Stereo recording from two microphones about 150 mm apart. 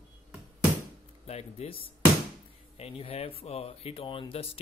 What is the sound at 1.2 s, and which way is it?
Speech, 40° left (ahead or behind).